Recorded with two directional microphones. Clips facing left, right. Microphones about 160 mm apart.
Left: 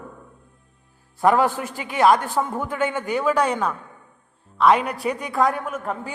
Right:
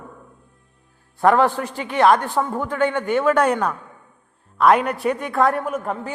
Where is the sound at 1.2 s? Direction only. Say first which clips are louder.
Right 2 dB; 5° left (ahead or behind).